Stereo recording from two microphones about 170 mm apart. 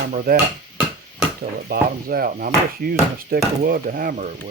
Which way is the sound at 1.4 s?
55° right (ahead or behind).